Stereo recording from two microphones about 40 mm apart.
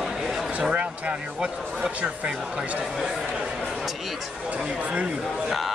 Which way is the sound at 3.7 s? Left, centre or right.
Centre.